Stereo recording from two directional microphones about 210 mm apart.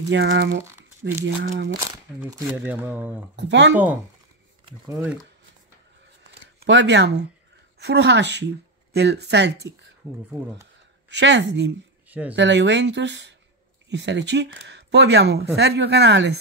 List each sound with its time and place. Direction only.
0.1 s speech: 55° right (ahead or behind)
1.8 s speech: 15° right (ahead or behind)
3.3 s speech: 55° right (ahead or behind)
6.6 s speech: 60° right (ahead or behind)
10.0 s speech: 10° right (ahead or behind)
11.1 s speech: 55° right (ahead or behind)
12.1 s speech: 5° right (ahead or behind)
12.4 s speech: 55° right (ahead or behind)